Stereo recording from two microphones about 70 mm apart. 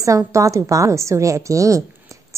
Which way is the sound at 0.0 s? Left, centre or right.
Right.